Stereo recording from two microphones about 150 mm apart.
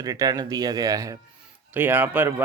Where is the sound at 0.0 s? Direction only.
25° right (ahead or behind).